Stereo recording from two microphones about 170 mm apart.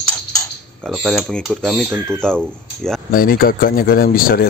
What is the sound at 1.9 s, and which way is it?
Speech, 10° right (ahead or behind).